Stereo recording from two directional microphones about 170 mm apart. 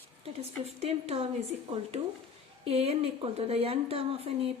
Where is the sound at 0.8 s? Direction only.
35° right (ahead or behind).